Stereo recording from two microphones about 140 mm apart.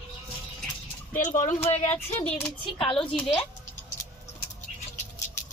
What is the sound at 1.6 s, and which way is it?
Speech, 50° left (ahead or behind).